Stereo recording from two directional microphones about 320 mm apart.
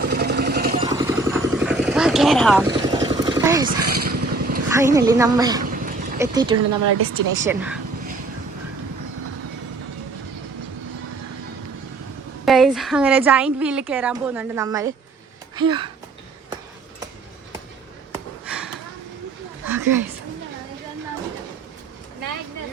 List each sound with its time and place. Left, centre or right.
0.0 s vehicle: right
0.8 s vehicle: centre
2.6 s vehicle: centre
3.8 s vehicle: right
4.7 s a woman's voice: centre
5.6 s a sound: right
6.1 s a woman's voice: centre
6.6 s speech: right
7.4 s a woman's voice: centre
12.5 s a woman's voice: centre
18.1 s a sound: centre